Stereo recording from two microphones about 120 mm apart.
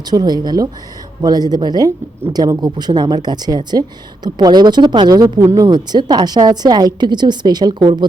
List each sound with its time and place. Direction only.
0.0 s speech: 35° right (ahead or behind)
5.4 s speech: 25° right (ahead or behind)
5.6 s speech: 40° right (ahead or behind)